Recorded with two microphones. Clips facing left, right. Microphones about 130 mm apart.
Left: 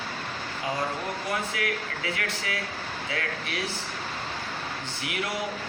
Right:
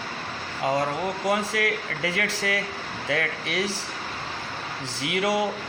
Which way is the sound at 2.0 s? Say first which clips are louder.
Right 5 dB; 85° right.